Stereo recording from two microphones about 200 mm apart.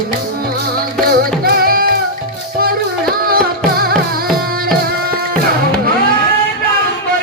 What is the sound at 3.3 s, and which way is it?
Music, 50° right (ahead or behind).